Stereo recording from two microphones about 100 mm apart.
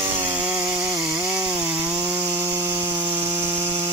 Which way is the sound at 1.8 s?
30° right (ahead or behind).